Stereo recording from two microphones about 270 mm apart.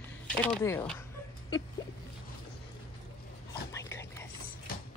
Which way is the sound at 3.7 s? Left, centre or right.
Centre.